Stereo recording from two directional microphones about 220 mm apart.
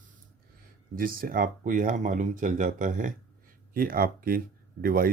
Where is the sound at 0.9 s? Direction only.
40° right (ahead or behind).